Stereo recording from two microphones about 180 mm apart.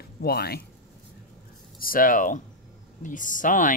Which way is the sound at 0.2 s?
60° left (ahead or behind).